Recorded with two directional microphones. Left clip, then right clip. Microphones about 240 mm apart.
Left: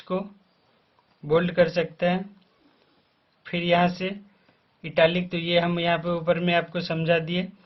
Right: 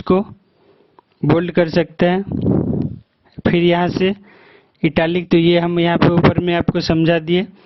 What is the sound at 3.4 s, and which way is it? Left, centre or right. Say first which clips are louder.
Speech: right 7 dB; right.